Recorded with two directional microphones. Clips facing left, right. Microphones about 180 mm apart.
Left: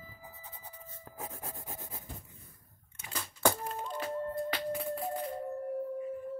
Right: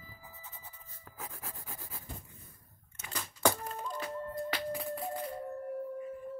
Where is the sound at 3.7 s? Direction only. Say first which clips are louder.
Left 1 dB; 30° left (ahead or behind).